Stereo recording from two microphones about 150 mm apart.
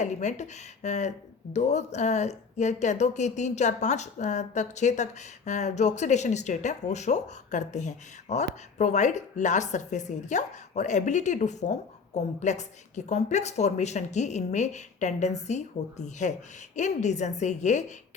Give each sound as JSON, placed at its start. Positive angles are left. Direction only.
{"t": 0.0, "sound": "speech", "side_deg": 50}